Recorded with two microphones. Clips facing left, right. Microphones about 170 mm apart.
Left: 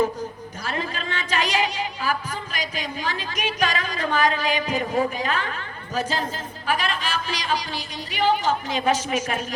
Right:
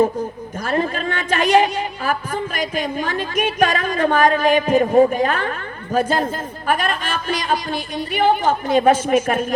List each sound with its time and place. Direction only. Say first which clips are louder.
0.0 s a woman's voice: right 6 dB; 50° right (ahead or behind)